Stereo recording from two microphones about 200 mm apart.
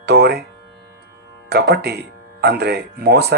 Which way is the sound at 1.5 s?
55° right (ahead or behind).